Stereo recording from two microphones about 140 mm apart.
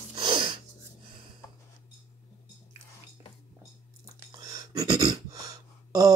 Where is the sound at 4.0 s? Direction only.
25° right (ahead or behind).